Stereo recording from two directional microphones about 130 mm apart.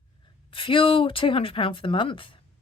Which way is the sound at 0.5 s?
45° left (ahead or behind).